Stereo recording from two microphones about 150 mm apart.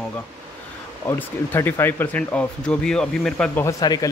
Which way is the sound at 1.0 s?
15° left (ahead or behind).